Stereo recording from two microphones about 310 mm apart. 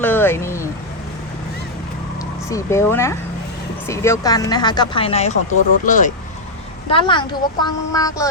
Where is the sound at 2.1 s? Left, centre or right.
Centre.